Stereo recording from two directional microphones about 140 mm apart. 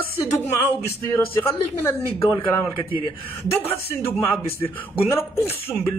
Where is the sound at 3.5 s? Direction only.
15° left (ahead or behind).